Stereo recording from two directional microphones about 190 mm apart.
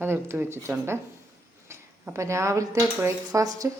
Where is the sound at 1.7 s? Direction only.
15° right (ahead or behind).